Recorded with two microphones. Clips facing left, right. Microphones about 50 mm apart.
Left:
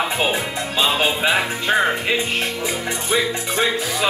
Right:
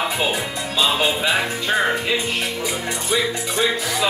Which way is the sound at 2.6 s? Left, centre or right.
Left.